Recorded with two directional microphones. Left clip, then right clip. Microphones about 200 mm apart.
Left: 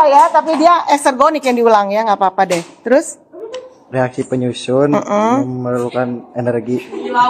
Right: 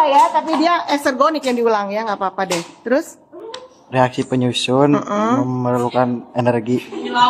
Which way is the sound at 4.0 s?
15° right (ahead or behind).